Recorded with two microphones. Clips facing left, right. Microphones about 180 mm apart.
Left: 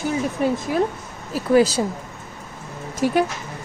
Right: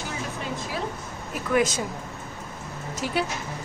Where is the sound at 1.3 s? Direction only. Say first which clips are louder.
Left 7 dB; 35° left (ahead or behind).